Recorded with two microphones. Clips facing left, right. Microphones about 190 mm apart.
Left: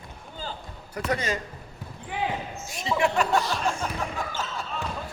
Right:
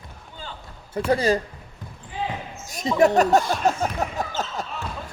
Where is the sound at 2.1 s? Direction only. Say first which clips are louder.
Even; 70° left (ahead or behind).